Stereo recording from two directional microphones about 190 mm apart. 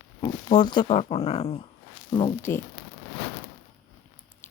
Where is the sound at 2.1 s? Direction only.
20° left (ahead or behind).